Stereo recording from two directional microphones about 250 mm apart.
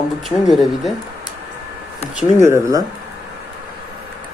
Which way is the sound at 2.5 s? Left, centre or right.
Centre.